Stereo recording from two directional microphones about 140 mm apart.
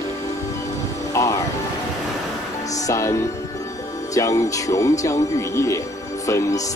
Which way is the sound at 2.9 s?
20° left (ahead or behind).